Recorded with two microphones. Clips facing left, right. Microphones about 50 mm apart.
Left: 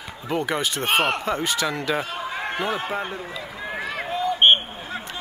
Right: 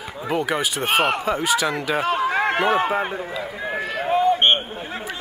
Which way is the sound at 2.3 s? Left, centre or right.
Right.